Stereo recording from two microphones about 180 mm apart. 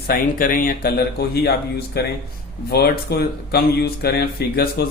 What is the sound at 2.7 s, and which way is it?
Speech, 60° left (ahead or behind).